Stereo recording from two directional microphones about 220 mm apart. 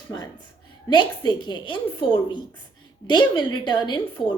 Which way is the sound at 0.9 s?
20° left (ahead or behind).